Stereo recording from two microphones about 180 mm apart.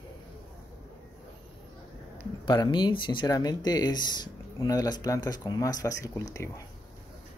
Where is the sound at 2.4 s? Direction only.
25° left (ahead or behind).